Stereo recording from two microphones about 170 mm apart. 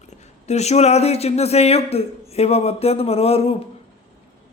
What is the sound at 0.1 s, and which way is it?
A man's voice, 40° left (ahead or behind).